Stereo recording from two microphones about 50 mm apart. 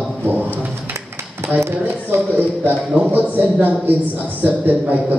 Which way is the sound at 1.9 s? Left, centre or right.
Right.